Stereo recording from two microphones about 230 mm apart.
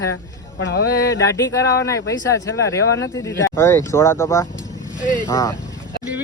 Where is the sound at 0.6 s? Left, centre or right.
Left.